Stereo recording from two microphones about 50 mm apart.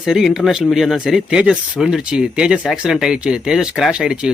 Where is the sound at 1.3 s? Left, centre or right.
Centre.